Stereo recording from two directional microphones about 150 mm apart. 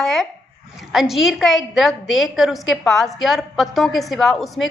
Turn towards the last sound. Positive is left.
turn(degrees=0)  # may be behind; listen again after turning